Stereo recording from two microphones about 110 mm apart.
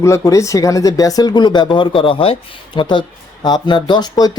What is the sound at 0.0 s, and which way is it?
Speech, 30° left (ahead or behind).